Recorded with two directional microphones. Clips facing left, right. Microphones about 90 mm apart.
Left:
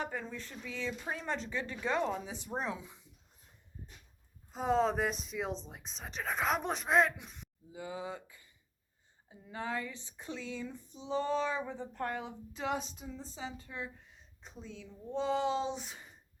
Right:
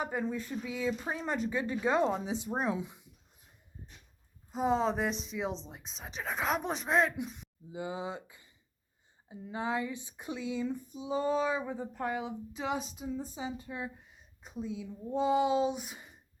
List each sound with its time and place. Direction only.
0.0 s speech: 15° right (ahead or behind)
4.5 s speech: centre (ahead or behind)
7.7 s speech: 20° right (ahead or behind)